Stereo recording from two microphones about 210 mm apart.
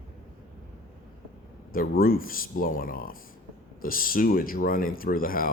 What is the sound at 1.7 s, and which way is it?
Speech, 45° left (ahead or behind).